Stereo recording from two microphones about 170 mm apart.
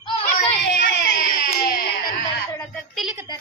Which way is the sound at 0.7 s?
70° left (ahead or behind).